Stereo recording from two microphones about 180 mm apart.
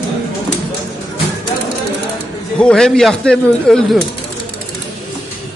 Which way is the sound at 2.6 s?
5° left (ahead or behind).